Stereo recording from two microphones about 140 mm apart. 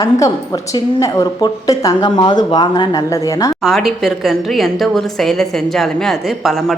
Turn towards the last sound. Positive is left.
turn(degrees=0)  # may be behind; listen again after turning